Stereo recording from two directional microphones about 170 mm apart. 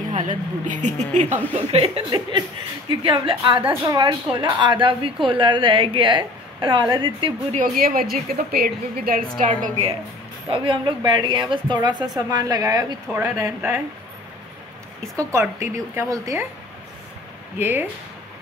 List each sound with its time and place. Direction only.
0.1 s speech: 45° right (ahead or behind)
1.7 s speech: 35° right (ahead or behind)
7.8 s a woman's voice: 60° right (ahead or behind)
9.5 s speech: 45° right (ahead or behind)
10.5 s speech: 30° right (ahead or behind); by 13.7 s 15° right (ahead or behind)
15.1 s speech: 15° right (ahead or behind)
17.6 s speech: 10° right (ahead or behind)